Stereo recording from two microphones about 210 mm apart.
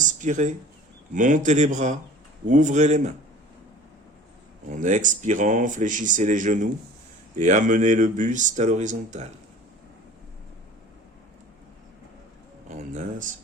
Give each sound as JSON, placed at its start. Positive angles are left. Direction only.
{"t": 0.0, "sound": "a sound", "side_deg": -35}
{"t": 1.1, "sound": "speech", "side_deg": -35}
{"t": 4.7, "sound": "speech", "side_deg": -35}
{"t": 12.6, "sound": "speech", "side_deg": -35}